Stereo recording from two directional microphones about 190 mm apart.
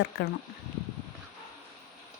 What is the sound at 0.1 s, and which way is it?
Speech, 65° left (ahead or behind).